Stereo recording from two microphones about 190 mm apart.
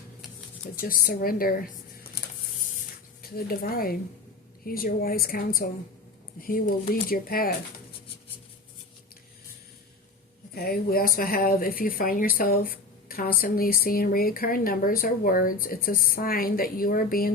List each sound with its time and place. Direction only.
0.8 s speech: 50° left (ahead or behind)
3.3 s speech: 50° left (ahead or behind)
10.5 s speech: 55° left (ahead or behind)